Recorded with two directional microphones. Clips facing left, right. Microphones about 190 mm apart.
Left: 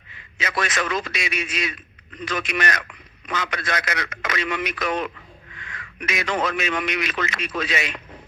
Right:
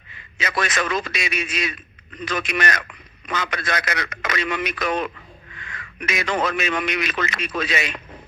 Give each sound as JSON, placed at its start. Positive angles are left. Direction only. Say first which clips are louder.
{"t": 0.3, "sound": "a man's voice", "louder": "right 1 dB", "side_deg": -40}